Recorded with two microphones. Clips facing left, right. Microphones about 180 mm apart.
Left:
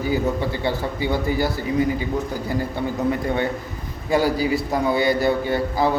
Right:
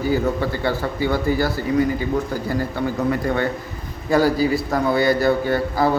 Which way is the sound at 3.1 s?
20° left (ahead or behind).